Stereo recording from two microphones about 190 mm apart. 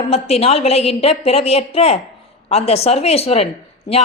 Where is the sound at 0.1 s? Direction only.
30° left (ahead or behind).